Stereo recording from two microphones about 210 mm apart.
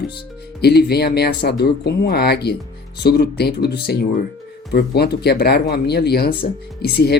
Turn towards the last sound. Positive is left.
turn(degrees=50)  # may be behind; listen again after turning